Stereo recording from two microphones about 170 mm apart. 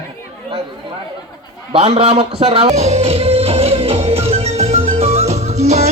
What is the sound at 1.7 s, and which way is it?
A man's voice, 40° right (ahead or behind).